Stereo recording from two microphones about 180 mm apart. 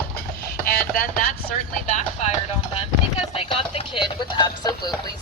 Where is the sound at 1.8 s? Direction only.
45° left (ahead or behind).